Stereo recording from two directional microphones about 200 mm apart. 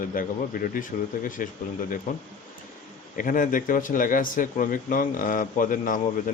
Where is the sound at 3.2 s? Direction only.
45° left (ahead or behind).